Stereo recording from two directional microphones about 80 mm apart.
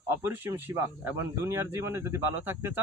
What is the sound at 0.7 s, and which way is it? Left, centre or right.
Speech, right.